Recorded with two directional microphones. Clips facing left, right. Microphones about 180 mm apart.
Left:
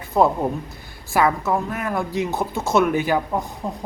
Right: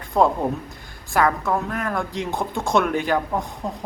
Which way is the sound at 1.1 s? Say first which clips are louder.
Left 1 dB; 5° left (ahead or behind).